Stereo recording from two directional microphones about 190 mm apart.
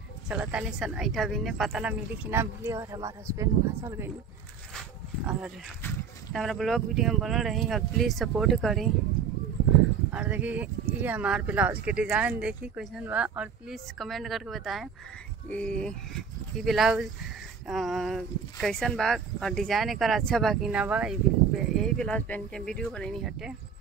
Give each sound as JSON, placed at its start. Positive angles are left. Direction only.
{"t": 0.3, "sound": "speech", "side_deg": -5}
{"t": 5.2, "sound": "speech", "side_deg": -5}
{"t": 10.1, "sound": "speech", "side_deg": -10}